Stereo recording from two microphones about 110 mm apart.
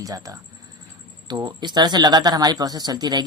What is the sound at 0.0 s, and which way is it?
Speech, 35° right (ahead or behind).